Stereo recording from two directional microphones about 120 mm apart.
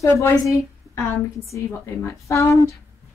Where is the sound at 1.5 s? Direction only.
25° left (ahead or behind).